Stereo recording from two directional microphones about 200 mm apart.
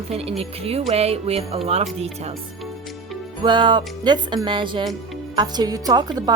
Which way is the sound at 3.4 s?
25° right (ahead or behind).